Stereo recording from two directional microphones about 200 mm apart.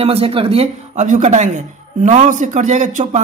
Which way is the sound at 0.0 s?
30° right (ahead or behind).